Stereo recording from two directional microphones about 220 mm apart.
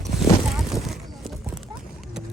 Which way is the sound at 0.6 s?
Centre (ahead or behind).